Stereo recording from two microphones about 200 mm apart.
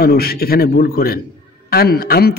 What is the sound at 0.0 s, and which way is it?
Mantra, 50° left (ahead or behind).